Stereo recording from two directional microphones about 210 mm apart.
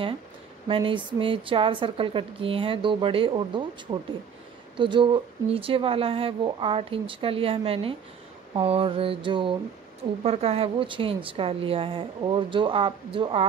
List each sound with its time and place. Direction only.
0.7 s speech: 25° right (ahead or behind)